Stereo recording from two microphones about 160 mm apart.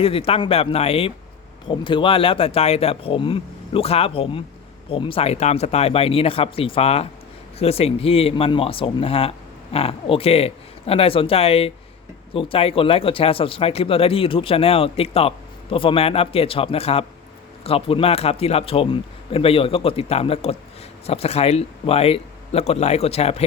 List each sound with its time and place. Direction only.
0.0 s speech: 35° left (ahead or behind)